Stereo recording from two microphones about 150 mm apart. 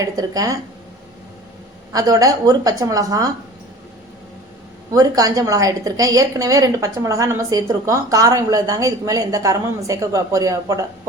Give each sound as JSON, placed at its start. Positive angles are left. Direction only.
{"t": 0.0, "sound": "a woman's voice", "side_deg": -25}
{"t": 1.9, "sound": "a woman's voice", "side_deg": -25}
{"t": 4.9, "sound": "a woman's voice", "side_deg": -25}